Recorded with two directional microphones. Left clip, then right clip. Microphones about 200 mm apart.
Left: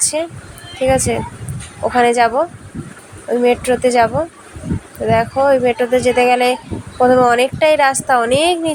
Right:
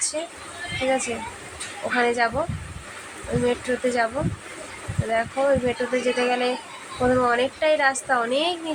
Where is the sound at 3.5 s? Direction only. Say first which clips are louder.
Left 10 dB; 35° left (ahead or behind).